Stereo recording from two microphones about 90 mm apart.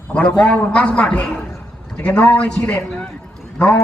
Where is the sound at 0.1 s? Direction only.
15° left (ahead or behind).